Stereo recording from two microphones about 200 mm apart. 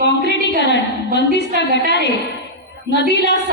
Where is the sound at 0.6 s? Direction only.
60° left (ahead or behind).